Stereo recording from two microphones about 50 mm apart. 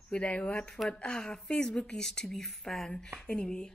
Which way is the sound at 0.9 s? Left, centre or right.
Left.